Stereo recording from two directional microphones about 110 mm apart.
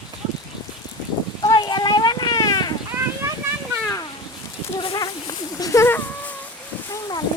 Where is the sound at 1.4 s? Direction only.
40° left (ahead or behind).